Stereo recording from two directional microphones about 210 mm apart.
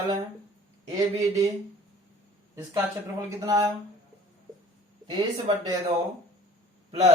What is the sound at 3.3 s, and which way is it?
Speech, 15° right (ahead or behind).